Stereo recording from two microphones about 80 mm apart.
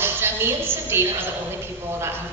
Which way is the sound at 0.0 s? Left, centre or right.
Right.